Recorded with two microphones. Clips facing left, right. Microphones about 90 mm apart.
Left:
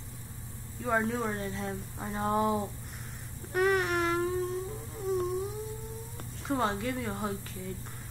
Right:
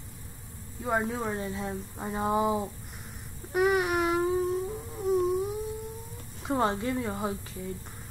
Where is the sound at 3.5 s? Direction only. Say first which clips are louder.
Right 2 dB; 10° right (ahead or behind).